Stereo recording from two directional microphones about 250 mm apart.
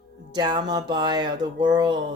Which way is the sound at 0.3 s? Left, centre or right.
Centre.